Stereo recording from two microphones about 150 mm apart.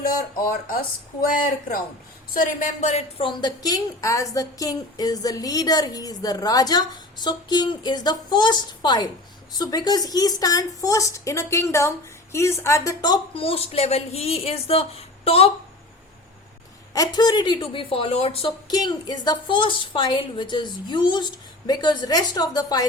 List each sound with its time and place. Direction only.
0.0 s speech: 75° left (ahead or behind)
2.3 s speech: 60° left (ahead or behind)
3.2 s speech: 30° left (ahead or behind)
16.9 s a woman's voice: 25° left (ahead or behind)
18.7 s a woman's voice: 25° left (ahead or behind)